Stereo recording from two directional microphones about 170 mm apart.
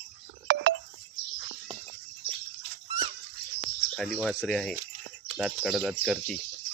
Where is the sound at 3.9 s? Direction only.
Centre (ahead or behind).